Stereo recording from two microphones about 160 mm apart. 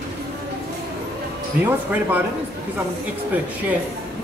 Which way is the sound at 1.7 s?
10° right (ahead or behind).